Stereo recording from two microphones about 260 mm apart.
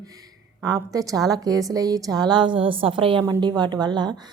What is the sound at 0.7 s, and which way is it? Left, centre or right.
A woman's voice, centre.